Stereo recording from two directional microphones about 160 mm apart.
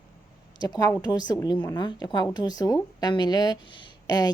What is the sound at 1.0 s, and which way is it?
A woman's voice, 25° left (ahead or behind).